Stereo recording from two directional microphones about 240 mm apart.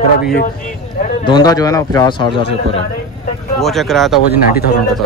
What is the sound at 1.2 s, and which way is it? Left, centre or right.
Speech, centre.